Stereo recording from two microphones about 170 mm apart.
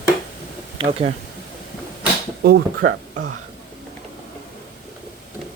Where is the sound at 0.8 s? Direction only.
30° right (ahead or behind).